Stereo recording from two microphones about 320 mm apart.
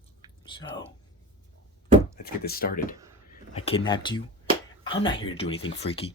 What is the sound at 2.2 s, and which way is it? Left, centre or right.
Speech, left.